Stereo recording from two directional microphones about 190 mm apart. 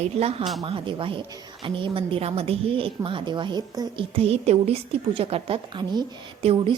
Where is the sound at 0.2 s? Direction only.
30° right (ahead or behind).